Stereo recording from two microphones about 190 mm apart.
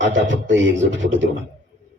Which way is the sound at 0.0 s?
75° right (ahead or behind).